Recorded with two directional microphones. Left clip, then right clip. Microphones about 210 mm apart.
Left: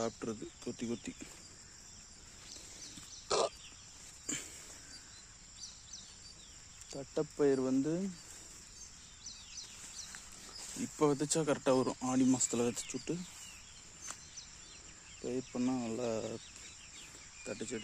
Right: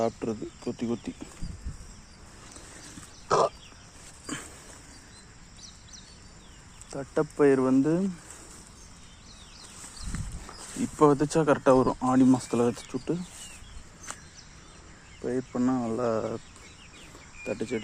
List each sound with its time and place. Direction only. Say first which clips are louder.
0.0 s speech: right 10 dB; 10° left (ahead or behind)
3.2 s a sound: right 10 dB; 15° left (ahead or behind)
6.9 s speech: right 9 dB; 5° left (ahead or behind)
10.1 s dog: right 8 dB; 40° right (ahead or behind)
10.9 s speech: right 10 dB; 10° left (ahead or behind)
15.2 s cricket: right 9 dB; 20° left (ahead or behind)
15.5 s speech: right 10 dB; 10° left (ahead or behind)
17.4 s speech: right 10 dB; 5° right (ahead or behind)